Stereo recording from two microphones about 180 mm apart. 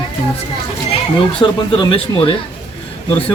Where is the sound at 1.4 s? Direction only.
30° left (ahead or behind).